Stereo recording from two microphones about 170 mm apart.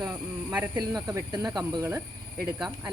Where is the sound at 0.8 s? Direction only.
20° right (ahead or behind).